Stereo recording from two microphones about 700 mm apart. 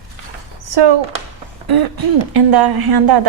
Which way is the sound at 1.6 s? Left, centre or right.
Right.